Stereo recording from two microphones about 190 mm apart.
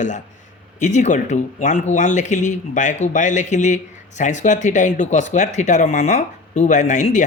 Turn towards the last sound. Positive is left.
turn(degrees=40)  # may be behind; listen again after turning